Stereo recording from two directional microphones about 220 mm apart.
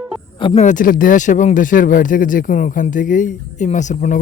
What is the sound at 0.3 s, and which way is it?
Speech, 25° left (ahead or behind).